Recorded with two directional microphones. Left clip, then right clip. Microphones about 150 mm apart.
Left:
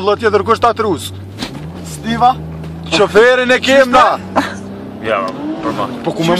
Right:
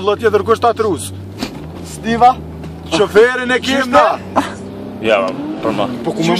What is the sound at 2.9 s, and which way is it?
A man's voice, 30° left (ahead or behind).